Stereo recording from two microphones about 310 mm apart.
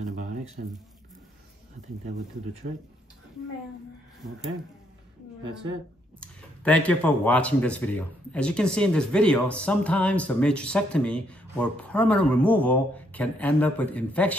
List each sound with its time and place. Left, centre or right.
0.6 s speech: right
6.2 s speech: centre